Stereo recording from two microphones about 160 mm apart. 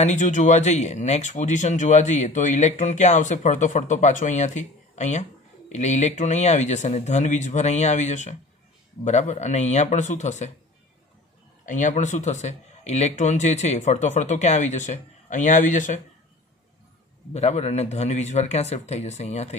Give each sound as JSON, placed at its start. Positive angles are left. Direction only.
{"t": 0.0, "sound": "speech", "side_deg": 50}
{"t": 11.6, "sound": "speech", "side_deg": 50}
{"t": 17.3, "sound": "speech", "side_deg": 45}